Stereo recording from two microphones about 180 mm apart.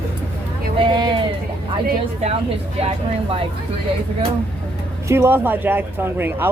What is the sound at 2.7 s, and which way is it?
Speech, 30° right (ahead or behind).